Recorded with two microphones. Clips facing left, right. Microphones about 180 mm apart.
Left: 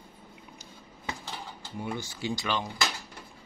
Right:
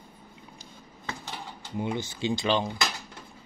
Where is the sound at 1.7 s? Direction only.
20° right (ahead or behind).